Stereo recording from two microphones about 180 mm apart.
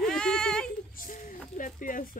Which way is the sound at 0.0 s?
5° left (ahead or behind).